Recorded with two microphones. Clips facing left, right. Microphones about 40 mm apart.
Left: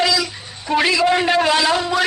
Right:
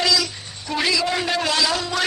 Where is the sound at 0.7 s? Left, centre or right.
Left.